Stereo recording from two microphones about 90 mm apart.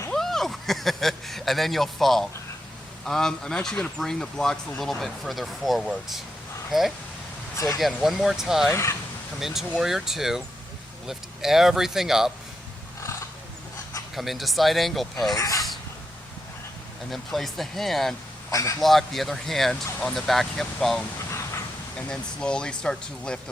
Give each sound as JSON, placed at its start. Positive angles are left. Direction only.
{"t": 0.1, "sound": "speech", "side_deg": 5}
{"t": 7.5, "sound": "speech", "side_deg": 40}
{"t": 7.8, "sound": "speech", "side_deg": 0}
{"t": 8.7, "sound": "speech", "side_deg": 30}
{"t": 9.4, "sound": "speech", "side_deg": -5}
{"t": 14.2, "sound": "speech", "side_deg": 0}
{"t": 15.4, "sound": "speech", "side_deg": 40}
{"t": 17.1, "sound": "speech", "side_deg": 0}
{"t": 18.5, "sound": "speech", "side_deg": 35}
{"t": 18.8, "sound": "speech", "side_deg": 0}